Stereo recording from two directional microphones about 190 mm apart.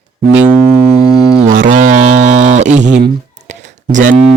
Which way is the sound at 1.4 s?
45° right (ahead or behind).